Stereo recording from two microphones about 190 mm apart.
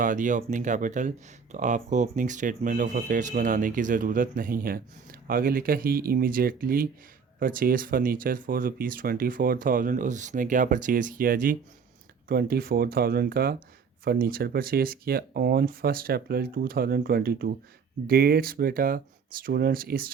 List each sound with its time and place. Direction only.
0.0 s speech: 40° right (ahead or behind)